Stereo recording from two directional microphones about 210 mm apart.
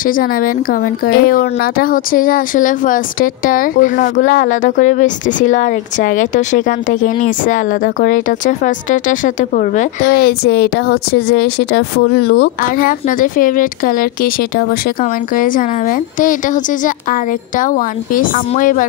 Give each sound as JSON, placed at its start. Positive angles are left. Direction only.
{"t": 0.0, "sound": "speech", "side_deg": 40}